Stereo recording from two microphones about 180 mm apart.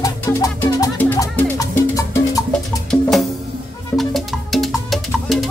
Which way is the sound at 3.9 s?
Centre (ahead or behind).